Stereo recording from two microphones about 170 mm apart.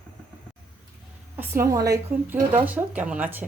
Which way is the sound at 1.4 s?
20° right (ahead or behind).